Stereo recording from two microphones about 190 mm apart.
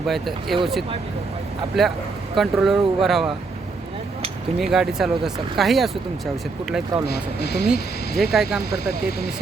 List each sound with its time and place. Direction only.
0.1 s speech: centre (ahead or behind)
4.6 s speech: centre (ahead or behind)
7.1 s speech: 60° left (ahead or behind)
7.7 s speech: centre (ahead or behind)